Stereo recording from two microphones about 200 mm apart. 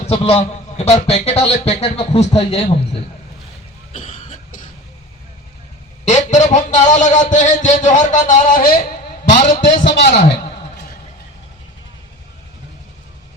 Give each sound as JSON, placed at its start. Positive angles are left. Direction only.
{"t": 0.0, "sound": "a man's voice", "side_deg": 30}
{"t": 3.9, "sound": "cough", "side_deg": 40}
{"t": 6.1, "sound": "a man's voice", "side_deg": 35}
{"t": 9.9, "sound": "a man's voice", "side_deg": 55}